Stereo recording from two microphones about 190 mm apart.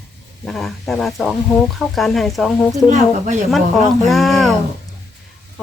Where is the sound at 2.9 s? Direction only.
40° right (ahead or behind).